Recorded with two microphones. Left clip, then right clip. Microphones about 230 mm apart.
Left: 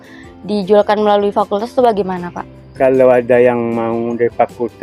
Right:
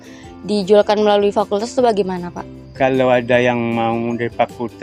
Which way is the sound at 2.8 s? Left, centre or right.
Right.